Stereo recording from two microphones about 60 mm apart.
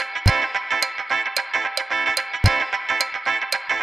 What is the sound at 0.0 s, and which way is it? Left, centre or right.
Music, centre.